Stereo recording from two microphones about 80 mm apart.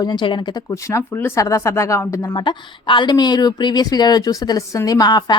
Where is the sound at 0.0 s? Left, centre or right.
Left.